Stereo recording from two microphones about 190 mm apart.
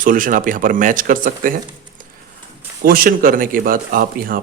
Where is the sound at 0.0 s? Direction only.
45° right (ahead or behind).